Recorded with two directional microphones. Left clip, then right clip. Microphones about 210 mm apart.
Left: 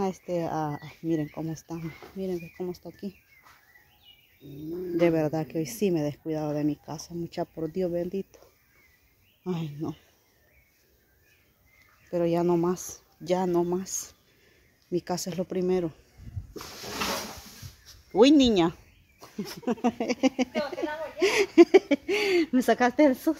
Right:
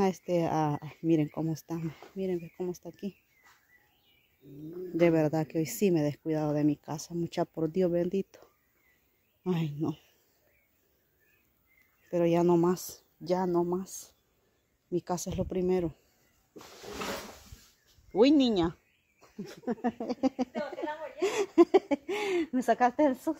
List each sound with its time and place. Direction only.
0.0 s speech: 35° right (ahead or behind)
4.9 s speech: 25° right (ahead or behind)
9.4 s speech: 35° right (ahead or behind)
12.1 s speech: 25° right (ahead or behind)
13.2 s speech: 10° right (ahead or behind)
18.1 s a sound: 5° right (ahead or behind)
19.6 s speech: 5° right (ahead or behind)